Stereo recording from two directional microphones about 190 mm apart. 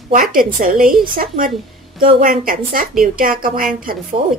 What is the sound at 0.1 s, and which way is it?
Speech, 50° right (ahead or behind).